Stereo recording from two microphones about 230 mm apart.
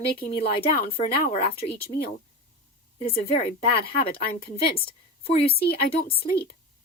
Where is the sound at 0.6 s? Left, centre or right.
Left.